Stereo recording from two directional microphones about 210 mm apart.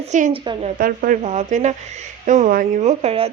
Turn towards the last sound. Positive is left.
turn(degrees=-30)  # may be behind; listen again after turning